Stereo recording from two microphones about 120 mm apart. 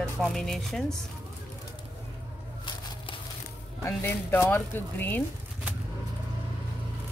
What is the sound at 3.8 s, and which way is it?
Speech, 20° left (ahead or behind).